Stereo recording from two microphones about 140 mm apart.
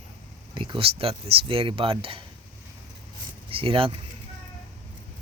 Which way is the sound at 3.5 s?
40° right (ahead or behind).